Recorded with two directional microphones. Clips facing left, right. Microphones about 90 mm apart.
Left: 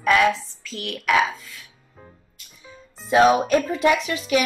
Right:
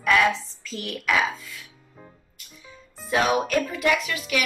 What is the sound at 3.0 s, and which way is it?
Speech, 25° left (ahead or behind).